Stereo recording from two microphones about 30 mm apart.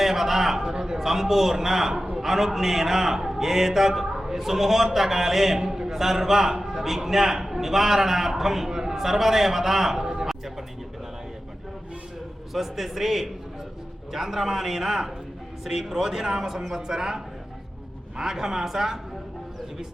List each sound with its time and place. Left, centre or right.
0.0 s a sound: centre
0.6 s speech: right
0.9 s a man's voice: centre
10.0 s a sound: right
12.5 s a man's voice: centre
18.2 s a man's voice: centre